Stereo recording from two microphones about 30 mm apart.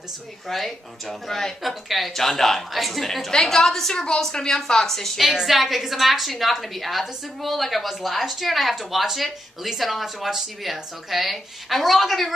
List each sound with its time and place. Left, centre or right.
0.5 s a woman's voice: centre
1.6 s a woman's voice: centre
2.1 s a woman's voice: centre
4.3 s a woman's voice: left
5.4 s a woman's voice: centre